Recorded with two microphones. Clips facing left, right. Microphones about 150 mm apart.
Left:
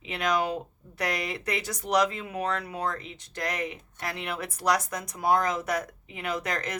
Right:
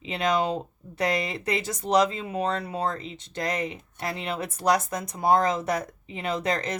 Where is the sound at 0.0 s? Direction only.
25° right (ahead or behind).